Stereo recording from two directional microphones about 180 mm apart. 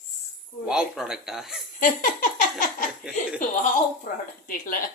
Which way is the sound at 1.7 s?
50° left (ahead or behind).